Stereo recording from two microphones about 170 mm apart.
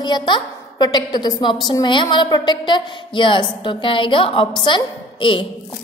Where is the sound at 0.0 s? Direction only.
25° left (ahead or behind).